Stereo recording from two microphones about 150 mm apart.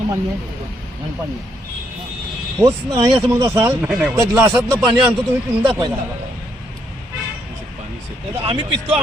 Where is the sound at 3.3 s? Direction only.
20° right (ahead or behind).